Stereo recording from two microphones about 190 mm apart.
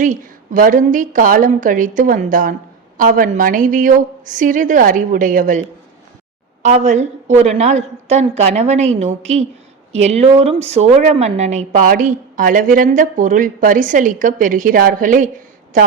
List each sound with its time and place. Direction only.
0.0 s a woman's voice: 45° right (ahead or behind)